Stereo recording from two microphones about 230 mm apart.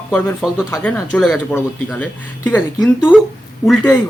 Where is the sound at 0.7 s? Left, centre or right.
Centre.